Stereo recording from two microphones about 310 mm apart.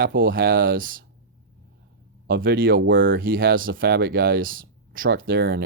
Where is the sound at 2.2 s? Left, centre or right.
Right.